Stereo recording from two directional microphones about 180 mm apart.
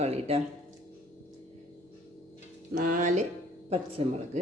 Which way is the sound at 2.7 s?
50° right (ahead or behind).